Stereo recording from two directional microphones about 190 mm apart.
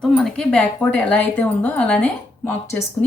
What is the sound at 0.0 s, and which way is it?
Speech, centre (ahead or behind).